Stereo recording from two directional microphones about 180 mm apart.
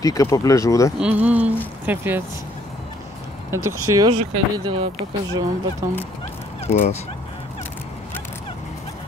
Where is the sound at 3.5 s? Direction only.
20° right (ahead or behind).